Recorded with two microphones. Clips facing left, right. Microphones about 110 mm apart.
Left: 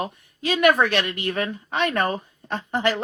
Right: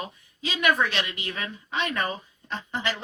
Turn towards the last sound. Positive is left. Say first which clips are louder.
# left 7 dB
turn(degrees=55)  # may be behind; listen again after turning